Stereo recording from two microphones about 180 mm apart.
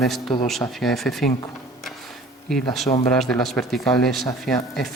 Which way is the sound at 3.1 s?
Centre (ahead or behind).